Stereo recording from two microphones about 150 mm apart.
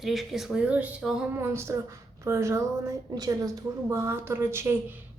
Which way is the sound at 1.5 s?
20° right (ahead or behind).